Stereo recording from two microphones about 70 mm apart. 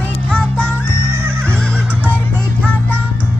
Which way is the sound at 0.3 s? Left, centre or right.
Left.